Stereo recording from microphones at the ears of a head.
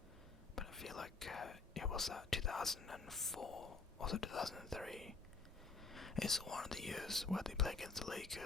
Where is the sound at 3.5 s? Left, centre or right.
Left.